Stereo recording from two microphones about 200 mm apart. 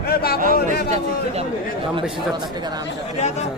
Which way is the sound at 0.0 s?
50° left (ahead or behind).